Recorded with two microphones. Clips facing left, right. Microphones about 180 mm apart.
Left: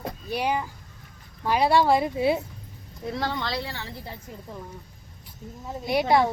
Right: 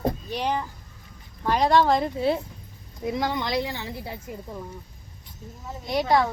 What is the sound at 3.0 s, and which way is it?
A woman's voice, 15° right (ahead or behind).